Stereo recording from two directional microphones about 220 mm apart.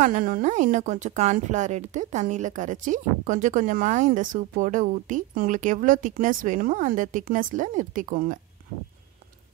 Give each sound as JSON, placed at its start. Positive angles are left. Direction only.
{"t": 0.0, "sound": "a woman's voice", "side_deg": -40}